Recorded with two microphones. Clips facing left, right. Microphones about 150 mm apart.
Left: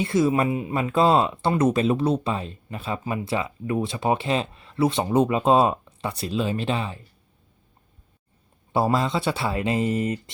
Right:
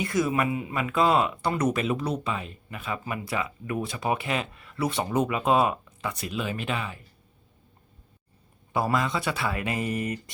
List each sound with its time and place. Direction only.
0.0 s speech: 25° left (ahead or behind)
8.7 s speech: 30° left (ahead or behind)